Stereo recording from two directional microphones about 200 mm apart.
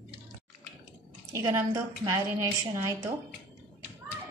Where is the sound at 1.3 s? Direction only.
15° right (ahead or behind).